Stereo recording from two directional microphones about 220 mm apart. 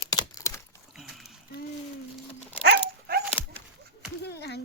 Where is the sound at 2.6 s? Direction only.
45° right (ahead or behind).